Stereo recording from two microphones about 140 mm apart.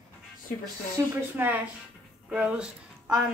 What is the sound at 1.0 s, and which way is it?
A woman's voice, 20° right (ahead or behind).